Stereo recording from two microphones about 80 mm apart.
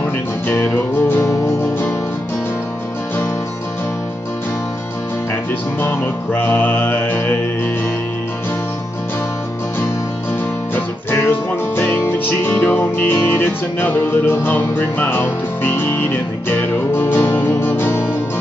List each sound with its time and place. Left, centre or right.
0.0 s music: left
5.8 s music: left
11.1 s music: left